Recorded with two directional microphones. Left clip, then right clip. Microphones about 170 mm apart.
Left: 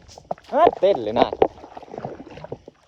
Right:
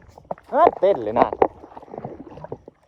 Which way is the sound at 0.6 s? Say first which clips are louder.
Even; 30° right (ahead or behind).